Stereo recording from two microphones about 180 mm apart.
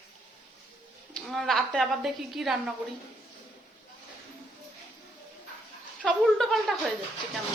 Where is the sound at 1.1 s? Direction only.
Centre (ahead or behind).